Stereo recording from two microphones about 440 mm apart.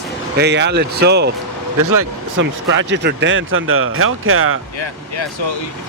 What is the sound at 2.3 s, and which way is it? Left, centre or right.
Speech, right.